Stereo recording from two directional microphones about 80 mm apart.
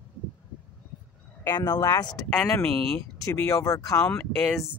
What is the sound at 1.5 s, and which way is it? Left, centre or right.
Speech, left.